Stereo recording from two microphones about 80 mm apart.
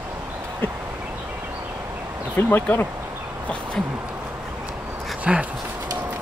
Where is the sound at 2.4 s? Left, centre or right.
Left.